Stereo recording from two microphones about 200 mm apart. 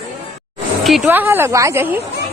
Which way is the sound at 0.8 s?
5° right (ahead or behind).